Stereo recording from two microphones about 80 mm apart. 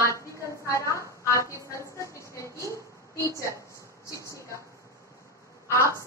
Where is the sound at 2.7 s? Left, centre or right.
Left.